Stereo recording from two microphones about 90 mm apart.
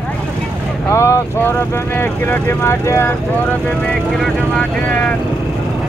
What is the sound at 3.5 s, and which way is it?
Speech, 10° left (ahead or behind).